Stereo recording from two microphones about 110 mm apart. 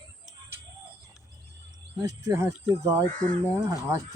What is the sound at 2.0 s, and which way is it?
Speech, 30° right (ahead or behind).